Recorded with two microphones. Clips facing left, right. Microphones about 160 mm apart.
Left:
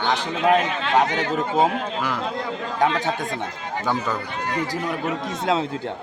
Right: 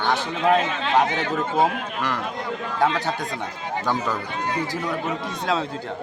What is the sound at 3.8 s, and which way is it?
Speech, centre (ahead or behind).